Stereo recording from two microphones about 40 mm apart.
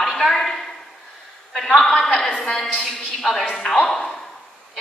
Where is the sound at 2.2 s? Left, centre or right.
Centre.